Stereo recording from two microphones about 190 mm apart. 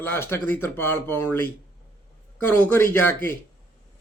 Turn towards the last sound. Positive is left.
turn(degrees=10)  # may be behind; listen again after turning